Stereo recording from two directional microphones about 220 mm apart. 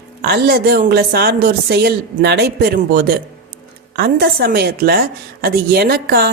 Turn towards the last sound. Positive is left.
turn(degrees=-45)  # may be behind; listen again after turning